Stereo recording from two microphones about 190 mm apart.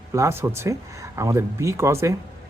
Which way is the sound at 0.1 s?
15° right (ahead or behind).